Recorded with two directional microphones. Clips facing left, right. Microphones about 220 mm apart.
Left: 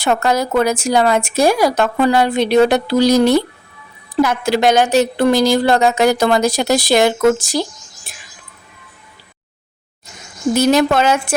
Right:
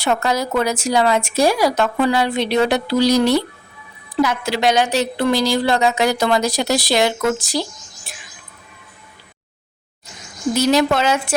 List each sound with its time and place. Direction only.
0.0 s a woman's voice: 50° left (ahead or behind)
10.5 s a woman's voice: 50° left (ahead or behind)